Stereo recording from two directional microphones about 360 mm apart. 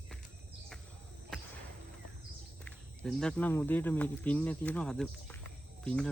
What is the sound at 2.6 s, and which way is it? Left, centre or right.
Speech, centre.